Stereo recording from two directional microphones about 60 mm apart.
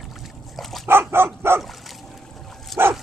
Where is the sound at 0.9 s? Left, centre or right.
Right.